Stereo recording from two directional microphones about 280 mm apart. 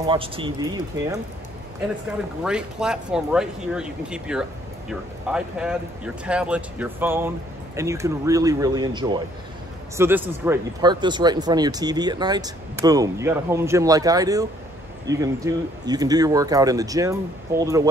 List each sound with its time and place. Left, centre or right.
0.0 s speech: centre
2.4 s speech: centre